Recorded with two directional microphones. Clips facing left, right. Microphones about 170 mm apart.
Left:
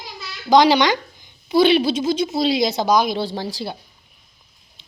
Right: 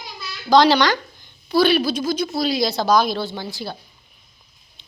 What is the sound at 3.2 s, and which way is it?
Speech, 35° left (ahead or behind).